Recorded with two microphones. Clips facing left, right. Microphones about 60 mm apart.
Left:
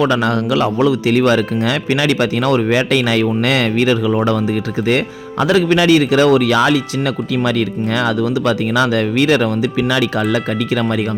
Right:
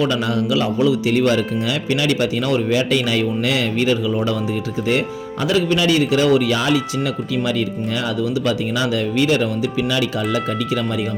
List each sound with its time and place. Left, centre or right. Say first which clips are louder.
0.0 s speech: left 4 dB; left